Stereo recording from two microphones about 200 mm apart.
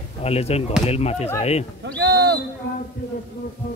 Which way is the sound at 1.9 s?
60° right (ahead or behind).